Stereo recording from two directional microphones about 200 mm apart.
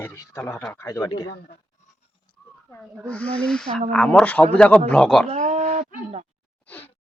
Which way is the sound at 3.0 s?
5° left (ahead or behind).